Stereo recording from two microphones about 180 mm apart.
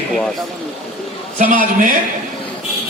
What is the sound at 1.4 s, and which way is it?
Speech, 50° right (ahead or behind).